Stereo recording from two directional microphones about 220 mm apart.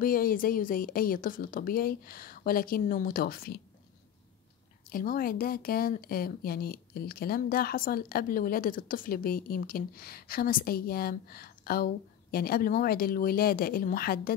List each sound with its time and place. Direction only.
0.0 s a woman's voice: 40° left (ahead or behind)
4.8 s speech: 40° left (ahead or behind)